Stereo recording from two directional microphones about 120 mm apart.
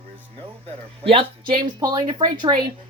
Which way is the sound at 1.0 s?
50° right (ahead or behind).